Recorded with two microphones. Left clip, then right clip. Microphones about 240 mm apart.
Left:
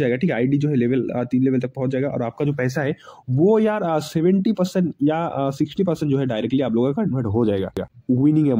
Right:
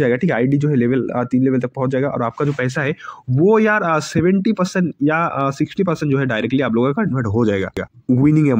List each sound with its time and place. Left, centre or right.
0.0 s a man's voice: centre
7.3 s speech: right